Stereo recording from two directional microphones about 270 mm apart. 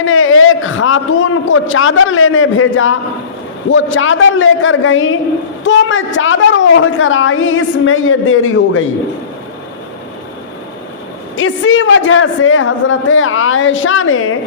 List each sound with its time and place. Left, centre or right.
0.0 s a woman's voice: left
11.3 s a woman's voice: left